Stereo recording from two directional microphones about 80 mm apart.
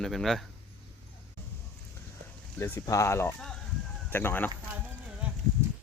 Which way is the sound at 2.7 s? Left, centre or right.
Left.